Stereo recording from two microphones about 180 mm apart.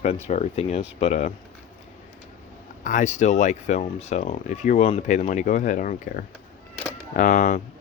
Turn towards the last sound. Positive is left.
turn(degrees=45)  # may be behind; listen again after turning